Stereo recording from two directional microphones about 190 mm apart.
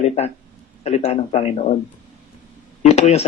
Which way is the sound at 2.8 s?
35° left (ahead or behind).